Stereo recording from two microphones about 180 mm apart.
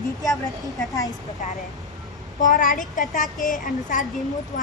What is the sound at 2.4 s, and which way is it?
A woman's voice, 50° left (ahead or behind).